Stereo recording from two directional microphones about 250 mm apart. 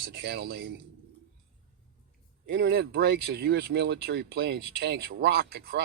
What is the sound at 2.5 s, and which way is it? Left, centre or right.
Speech, right.